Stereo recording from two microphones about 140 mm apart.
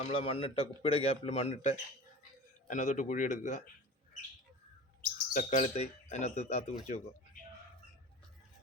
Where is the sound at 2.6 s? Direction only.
65° left (ahead or behind).